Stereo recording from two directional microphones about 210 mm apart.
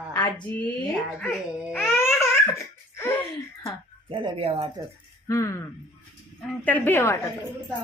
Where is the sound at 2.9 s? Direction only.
10° left (ahead or behind).